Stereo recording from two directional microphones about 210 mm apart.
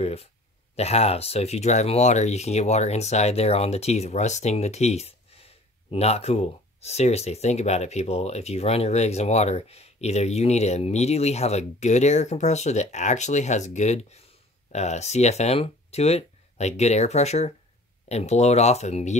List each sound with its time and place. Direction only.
0.0 s speech: 30° left (ahead or behind)